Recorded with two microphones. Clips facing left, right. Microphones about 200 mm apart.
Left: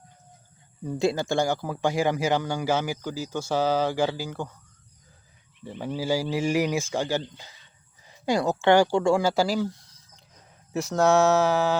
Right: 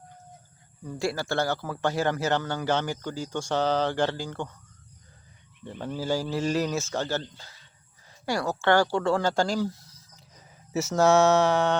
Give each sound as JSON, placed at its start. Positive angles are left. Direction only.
{"t": 0.9, "sound": "speech", "side_deg": 20}
{"t": 5.6, "sound": "speech", "side_deg": 10}